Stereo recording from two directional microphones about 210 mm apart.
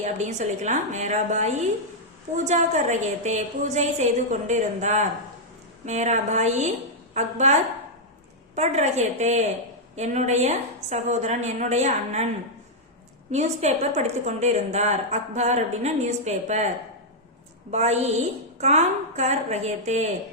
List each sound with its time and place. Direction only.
0.0 s a woman's voice: 35° right (ahead or behind)
8.5 s a woman's voice: 30° right (ahead or behind)
13.3 s a woman's voice: 30° right (ahead or behind)